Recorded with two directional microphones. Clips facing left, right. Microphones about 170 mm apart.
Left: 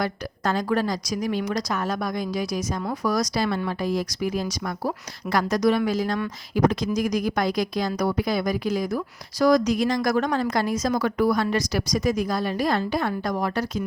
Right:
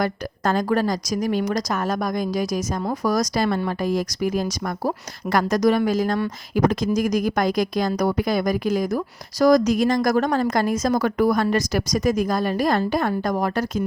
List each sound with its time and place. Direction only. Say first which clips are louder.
0.0 s a woman's voice: right 3 dB; 45° right (ahead or behind)